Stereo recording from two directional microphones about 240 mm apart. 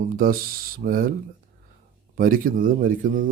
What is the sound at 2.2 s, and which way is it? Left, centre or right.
Speech, right.